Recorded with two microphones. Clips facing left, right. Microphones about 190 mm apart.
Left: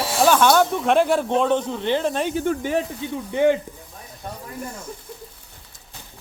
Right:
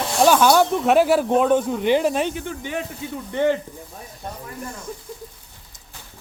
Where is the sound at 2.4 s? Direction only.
40° left (ahead or behind).